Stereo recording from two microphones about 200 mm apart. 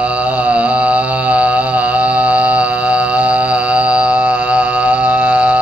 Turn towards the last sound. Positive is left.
turn(degrees=-5)  # may be behind; listen again after turning